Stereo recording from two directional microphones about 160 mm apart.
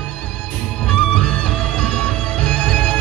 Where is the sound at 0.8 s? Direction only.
5° left (ahead or behind).